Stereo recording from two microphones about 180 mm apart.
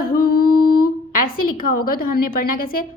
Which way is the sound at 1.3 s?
50° left (ahead or behind).